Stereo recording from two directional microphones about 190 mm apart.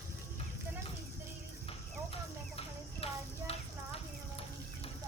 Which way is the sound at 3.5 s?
30° left (ahead or behind).